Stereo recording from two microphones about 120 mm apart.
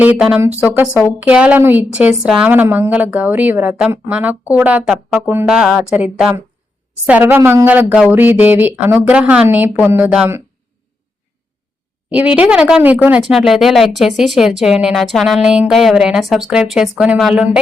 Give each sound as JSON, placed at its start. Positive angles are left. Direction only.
{"t": 0.0, "sound": "a woman's voice", "side_deg": -10}
{"t": 12.1, "sound": "a woman's voice", "side_deg": -10}